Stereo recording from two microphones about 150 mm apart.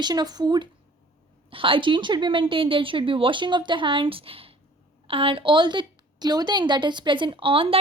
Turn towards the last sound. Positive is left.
turn(degrees=-35)  # may be behind; listen again after turning